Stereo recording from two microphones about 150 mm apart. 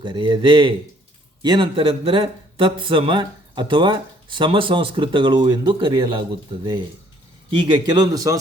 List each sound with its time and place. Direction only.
0.0 s speech: 30° right (ahead or behind)
7.5 s a man's voice: 30° right (ahead or behind)